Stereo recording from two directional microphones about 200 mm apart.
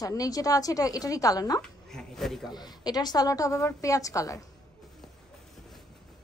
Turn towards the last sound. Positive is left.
turn(degrees=15)  # may be behind; listen again after turning